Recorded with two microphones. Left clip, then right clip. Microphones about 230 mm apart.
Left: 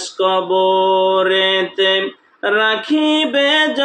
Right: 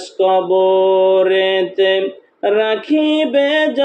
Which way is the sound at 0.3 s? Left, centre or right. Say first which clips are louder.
Right 2 dB; left.